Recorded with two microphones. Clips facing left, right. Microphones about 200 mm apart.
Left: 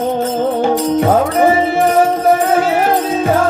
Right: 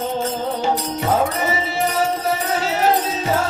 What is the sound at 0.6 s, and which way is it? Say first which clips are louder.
Music: left 9 dB; 55° left (ahead or behind).